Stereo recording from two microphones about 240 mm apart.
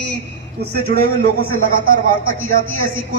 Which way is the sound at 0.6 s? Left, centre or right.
Right.